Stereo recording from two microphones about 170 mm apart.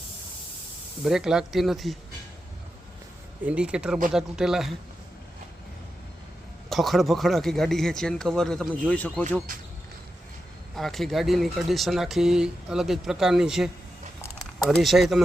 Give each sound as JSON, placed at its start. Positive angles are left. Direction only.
{"t": 1.0, "sound": "speech", "side_deg": -5}
{"t": 3.4, "sound": "speech", "side_deg": -5}
{"t": 6.7, "sound": "speech", "side_deg": 0}
{"t": 9.5, "sound": "speech", "side_deg": -55}
{"t": 10.8, "sound": "speech", "side_deg": 0}
{"t": 14.7, "sound": "speech", "side_deg": 0}